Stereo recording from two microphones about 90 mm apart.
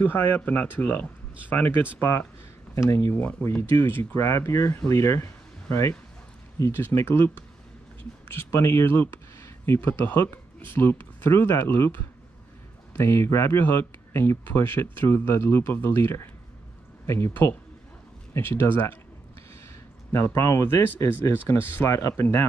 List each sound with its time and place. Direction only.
0.0 s speech: 20° left (ahead or behind)
3.2 s speech: 20° left (ahead or behind)
8.5 s speech: 30° left (ahead or behind)
18.3 s speech: 25° left (ahead or behind)
20.2 s speech: 30° left (ahead or behind)